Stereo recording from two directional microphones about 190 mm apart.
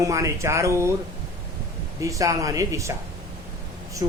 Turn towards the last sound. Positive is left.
turn(degrees=-20)  # may be behind; listen again after turning